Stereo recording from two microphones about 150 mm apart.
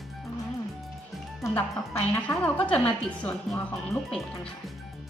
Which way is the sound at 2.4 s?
10° left (ahead or behind).